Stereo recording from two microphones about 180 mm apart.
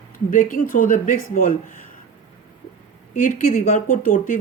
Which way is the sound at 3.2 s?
45° left (ahead or behind).